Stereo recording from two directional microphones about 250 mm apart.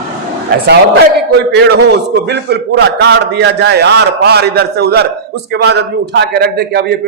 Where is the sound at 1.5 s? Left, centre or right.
Right.